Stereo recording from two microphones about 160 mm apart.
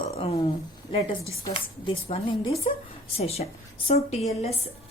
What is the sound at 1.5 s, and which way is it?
A woman's voice, 35° left (ahead or behind).